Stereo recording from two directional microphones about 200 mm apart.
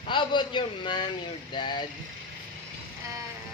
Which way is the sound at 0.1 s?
25° left (ahead or behind).